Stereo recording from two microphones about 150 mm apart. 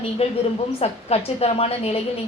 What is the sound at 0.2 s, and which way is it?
A woman's voice, 40° left (ahead or behind).